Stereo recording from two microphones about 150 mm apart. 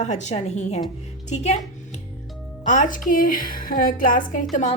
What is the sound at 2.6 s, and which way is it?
A woman's voice, 55° left (ahead or behind).